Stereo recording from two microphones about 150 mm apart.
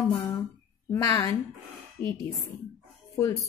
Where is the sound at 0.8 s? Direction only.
20° left (ahead or behind).